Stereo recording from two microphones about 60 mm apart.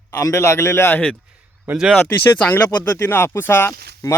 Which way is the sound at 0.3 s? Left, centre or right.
Left.